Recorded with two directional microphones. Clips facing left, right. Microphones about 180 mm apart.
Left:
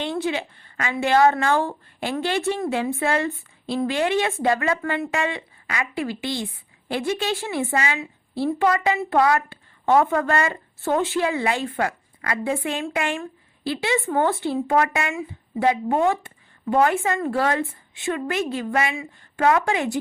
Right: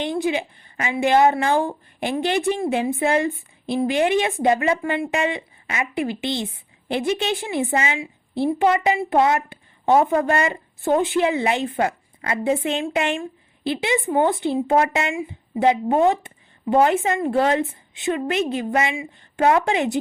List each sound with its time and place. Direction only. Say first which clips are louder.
0.0 s a woman's voice: right 3 dB; 15° right (ahead or behind)